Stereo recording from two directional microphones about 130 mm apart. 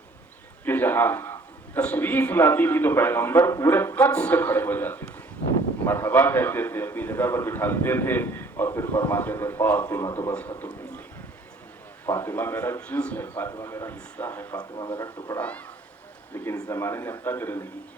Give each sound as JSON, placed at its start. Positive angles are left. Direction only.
{"t": 0.6, "sound": "a man's voice", "side_deg": 15}
{"t": 12.0, "sound": "a man's voice", "side_deg": 20}
{"t": 14.5, "sound": "speech", "side_deg": 35}
{"t": 15.4, "sound": "a man's voice", "side_deg": 10}